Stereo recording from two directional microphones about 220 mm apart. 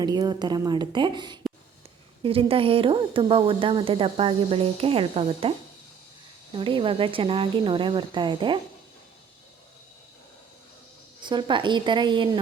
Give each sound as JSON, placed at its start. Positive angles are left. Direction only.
{"t": 0.0, "sound": "speech", "side_deg": -20}
{"t": 11.3, "sound": "speech", "side_deg": -20}